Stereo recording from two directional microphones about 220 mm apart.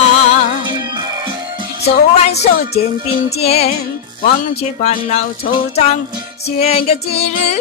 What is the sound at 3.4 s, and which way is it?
Music, 30° left (ahead or behind).